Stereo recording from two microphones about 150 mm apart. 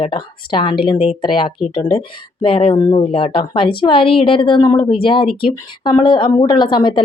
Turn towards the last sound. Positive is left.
turn(degrees=30)  # may be behind; listen again after turning